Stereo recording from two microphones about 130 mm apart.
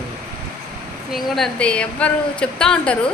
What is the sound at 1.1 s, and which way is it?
A woman's voice, centre (ahead or behind).